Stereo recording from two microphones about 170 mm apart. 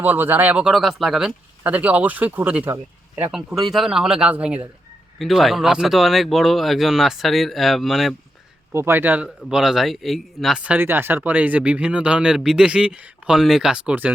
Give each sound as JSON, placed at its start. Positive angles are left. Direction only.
{"t": 0.0, "sound": "speech", "side_deg": -10}
{"t": 8.7, "sound": "speech", "side_deg": -15}